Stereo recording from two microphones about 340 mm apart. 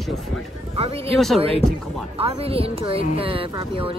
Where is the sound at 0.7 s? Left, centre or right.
Centre.